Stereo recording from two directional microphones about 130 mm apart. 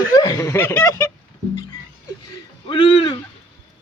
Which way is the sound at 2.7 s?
40° left (ahead or behind).